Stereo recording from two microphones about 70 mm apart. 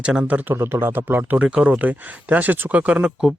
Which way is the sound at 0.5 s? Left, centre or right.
Right.